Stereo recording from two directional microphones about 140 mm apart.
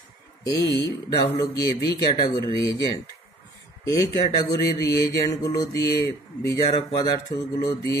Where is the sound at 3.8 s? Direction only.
20° left (ahead or behind).